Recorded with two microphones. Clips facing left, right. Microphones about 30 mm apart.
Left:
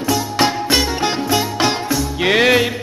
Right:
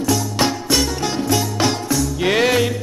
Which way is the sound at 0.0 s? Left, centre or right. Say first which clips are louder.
Left 2 dB; left.